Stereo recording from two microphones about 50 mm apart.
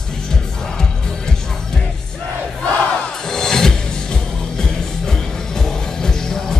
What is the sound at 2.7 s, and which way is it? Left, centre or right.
Crowd, left.